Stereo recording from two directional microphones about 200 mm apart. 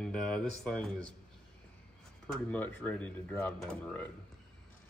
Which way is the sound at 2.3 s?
5° left (ahead or behind).